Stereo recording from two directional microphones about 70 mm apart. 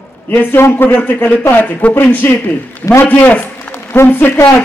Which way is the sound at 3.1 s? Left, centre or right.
Left.